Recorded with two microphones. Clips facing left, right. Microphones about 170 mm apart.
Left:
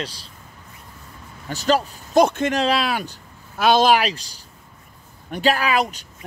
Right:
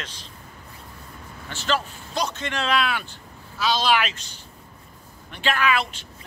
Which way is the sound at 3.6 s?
50° left (ahead or behind).